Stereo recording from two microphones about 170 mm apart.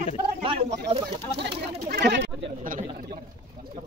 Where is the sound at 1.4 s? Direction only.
80° right.